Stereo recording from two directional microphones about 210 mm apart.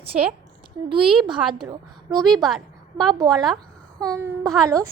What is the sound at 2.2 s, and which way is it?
A woman's voice, centre (ahead or behind).